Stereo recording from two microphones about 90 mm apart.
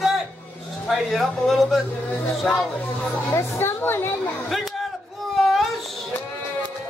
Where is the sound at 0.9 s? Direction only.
Centre (ahead or behind).